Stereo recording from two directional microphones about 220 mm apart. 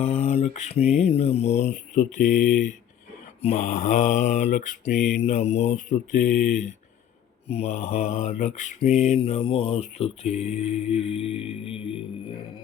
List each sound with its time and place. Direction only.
0.0 s mantra: 30° left (ahead or behind)